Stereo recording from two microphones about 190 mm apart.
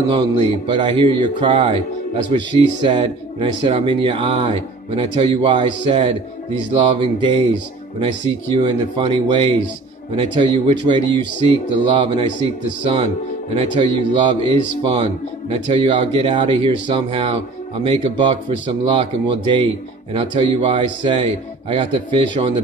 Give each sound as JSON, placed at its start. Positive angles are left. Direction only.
{"t": 0.1, "sound": "speech", "side_deg": -25}